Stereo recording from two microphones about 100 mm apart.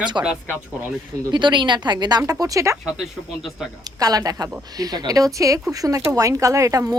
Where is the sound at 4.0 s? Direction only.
40° right (ahead or behind).